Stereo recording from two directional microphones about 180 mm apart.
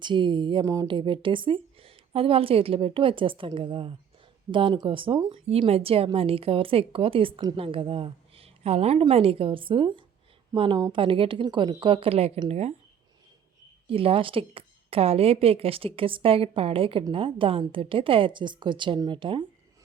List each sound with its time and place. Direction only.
0.0 s a woman's voice: 25° right (ahead or behind)
13.8 s a woman's voice: 30° right (ahead or behind)